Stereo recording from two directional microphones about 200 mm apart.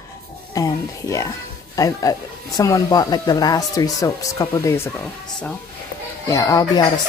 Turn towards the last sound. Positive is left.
turn(degrees=20)  # may be behind; listen again after turning